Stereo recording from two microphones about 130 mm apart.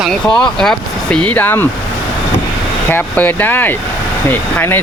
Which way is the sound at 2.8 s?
15° left (ahead or behind).